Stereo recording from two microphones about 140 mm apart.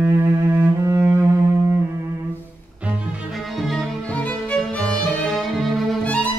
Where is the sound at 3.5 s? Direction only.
Centre (ahead or behind).